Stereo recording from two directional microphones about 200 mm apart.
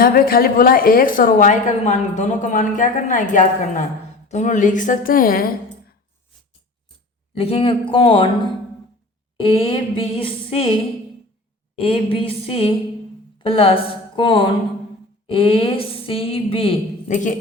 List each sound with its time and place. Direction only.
0.0 s a woman's voice: 45° left (ahead or behind)
7.3 s a woman's voice: 30° left (ahead or behind)
9.4 s a woman's voice: 30° left (ahead or behind)
11.8 s a woman's voice: 25° left (ahead or behind)